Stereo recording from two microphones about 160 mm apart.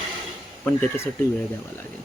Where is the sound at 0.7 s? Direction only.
10° left (ahead or behind).